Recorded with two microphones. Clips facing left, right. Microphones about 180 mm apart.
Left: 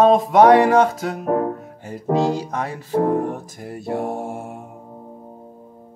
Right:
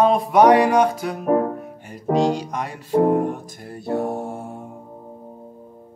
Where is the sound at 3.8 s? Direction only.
25° left (ahead or behind).